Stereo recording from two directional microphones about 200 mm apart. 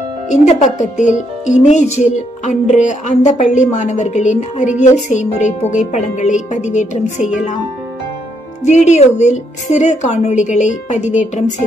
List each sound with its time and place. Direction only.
0.3 s a woman's voice: 35° left (ahead or behind)
8.6 s a woman's voice: 35° left (ahead or behind)